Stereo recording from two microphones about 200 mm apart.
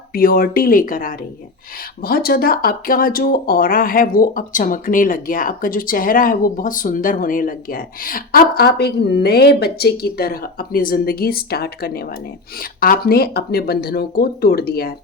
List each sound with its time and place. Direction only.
0.1 s speech: 45° left (ahead or behind)